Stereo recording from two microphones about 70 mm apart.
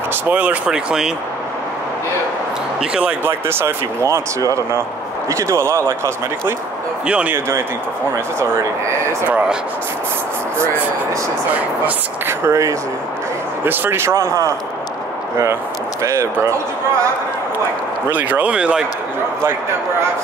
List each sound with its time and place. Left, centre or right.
0.1 s speech: right; by 1.1 s centre
3.3 s speech: right
5.3 s speech: right
7.1 s speech: centre
7.3 s speech: right
12.3 s speech: right
16.0 s speech: right
18.1 s speech: right